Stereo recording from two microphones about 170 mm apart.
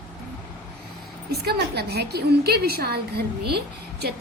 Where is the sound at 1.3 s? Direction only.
65° right (ahead or behind).